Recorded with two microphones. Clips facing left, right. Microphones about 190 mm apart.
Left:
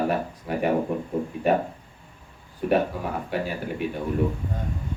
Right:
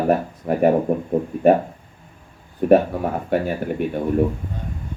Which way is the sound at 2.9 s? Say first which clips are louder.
Right 7 dB; 50° right (ahead or behind).